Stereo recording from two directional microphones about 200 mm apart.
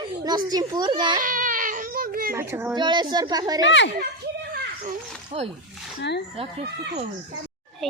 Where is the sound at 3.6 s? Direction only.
65° left (ahead or behind).